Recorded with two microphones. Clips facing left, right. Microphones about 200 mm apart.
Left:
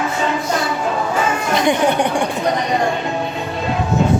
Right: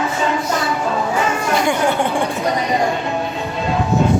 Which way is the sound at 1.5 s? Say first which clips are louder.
Left 2 dB; 20° left (ahead or behind).